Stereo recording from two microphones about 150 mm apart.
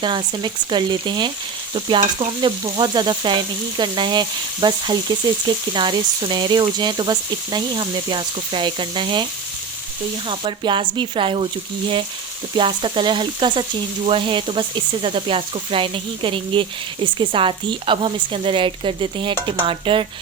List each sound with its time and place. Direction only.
0.0 s frying: 30° right (ahead or behind)
10.2 s frying: 35° right (ahead or behind)
12.5 s frying: 35° right (ahead or behind)